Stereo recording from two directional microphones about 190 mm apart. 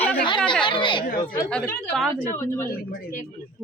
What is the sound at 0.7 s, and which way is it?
Speech, 25° left (ahead or behind).